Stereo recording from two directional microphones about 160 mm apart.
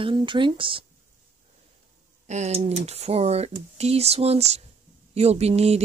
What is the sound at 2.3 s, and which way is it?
Speech, 45° right (ahead or behind).